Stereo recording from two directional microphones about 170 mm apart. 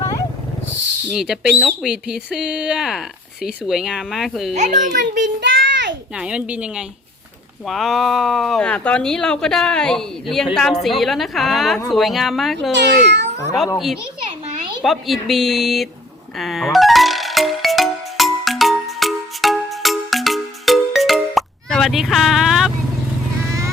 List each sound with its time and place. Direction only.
0.0 s a sound: 20° left (ahead or behind)
1.1 s speech: centre (ahead or behind)
4.5 s a child's voice: 45° right (ahead or behind)
5.1 s a sound: 90° right
6.1 s speech: 5° right (ahead or behind)
12.7 s speech: 90° right
14.8 s speech: centre (ahead or behind)
16.4 s music: centre (ahead or behind)